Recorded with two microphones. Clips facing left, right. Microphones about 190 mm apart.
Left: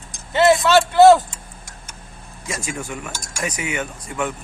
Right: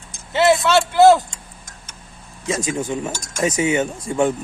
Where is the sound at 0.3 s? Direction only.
Centre (ahead or behind).